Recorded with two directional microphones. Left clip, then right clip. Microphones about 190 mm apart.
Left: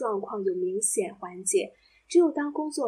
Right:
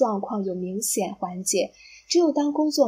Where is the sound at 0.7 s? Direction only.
20° right (ahead or behind).